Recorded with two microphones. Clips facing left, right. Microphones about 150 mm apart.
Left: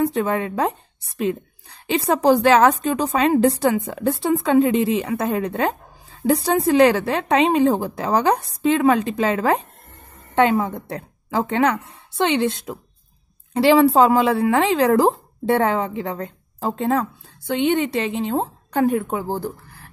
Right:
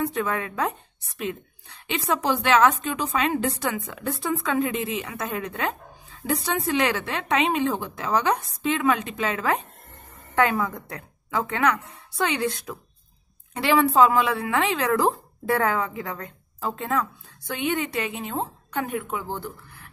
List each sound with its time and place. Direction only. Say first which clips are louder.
0.0 s a woman's voice: left 6 dB; 30° left (ahead or behind)